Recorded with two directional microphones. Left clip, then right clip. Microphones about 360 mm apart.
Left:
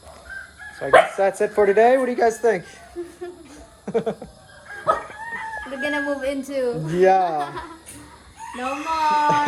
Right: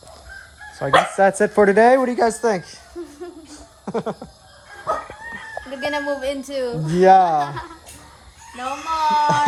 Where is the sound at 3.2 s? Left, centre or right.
Right.